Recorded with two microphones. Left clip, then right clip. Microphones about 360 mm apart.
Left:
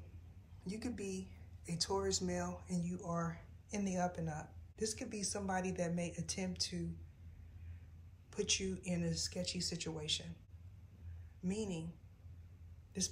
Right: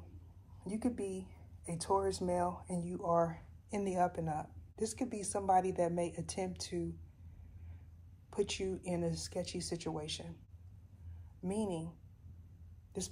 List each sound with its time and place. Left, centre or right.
0.7 s a woman's voice: centre
8.3 s speech: centre
11.4 s speech: centre